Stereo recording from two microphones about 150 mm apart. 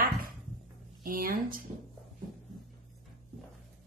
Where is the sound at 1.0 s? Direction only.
70° right (ahead or behind).